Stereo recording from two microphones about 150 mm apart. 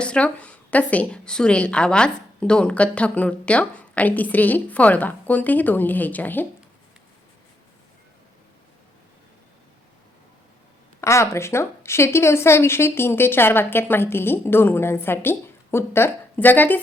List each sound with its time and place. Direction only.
0.0 s a woman's voice: 5° left (ahead or behind)
11.0 s a woman's voice: 20° left (ahead or behind)